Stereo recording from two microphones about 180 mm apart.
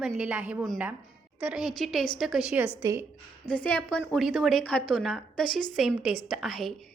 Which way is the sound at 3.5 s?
5° left (ahead or behind).